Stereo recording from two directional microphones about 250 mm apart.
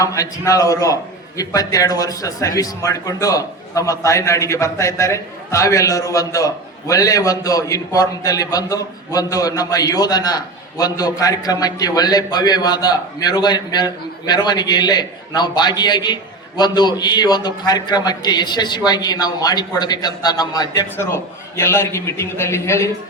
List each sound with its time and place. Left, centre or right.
0.0 s a man's voice: centre